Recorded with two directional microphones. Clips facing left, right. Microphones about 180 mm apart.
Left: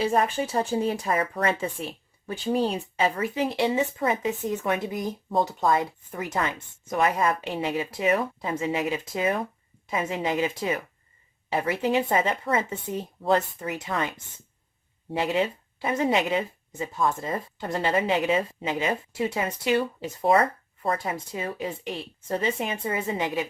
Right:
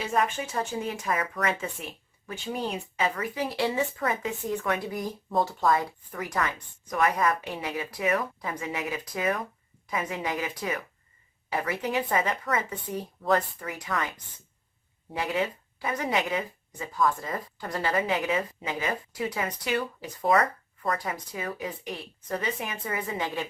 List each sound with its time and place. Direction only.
0.0 s a woman's voice: 30° left (ahead or behind)